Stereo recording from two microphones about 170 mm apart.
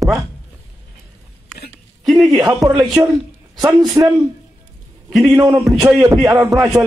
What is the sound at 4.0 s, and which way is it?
Speech, 20° right (ahead or behind).